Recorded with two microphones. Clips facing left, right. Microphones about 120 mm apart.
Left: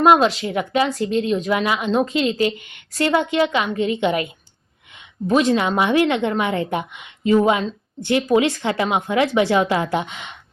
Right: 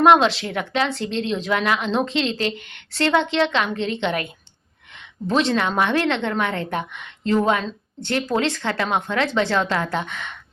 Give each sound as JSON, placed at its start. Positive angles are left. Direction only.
{"t": 0.0, "sound": "speech", "side_deg": 5}
{"t": 2.6, "sound": "a woman's voice", "side_deg": -60}
{"t": 2.9, "sound": "a woman's voice", "side_deg": 5}
{"t": 5.5, "sound": "a woman's voice", "side_deg": 10}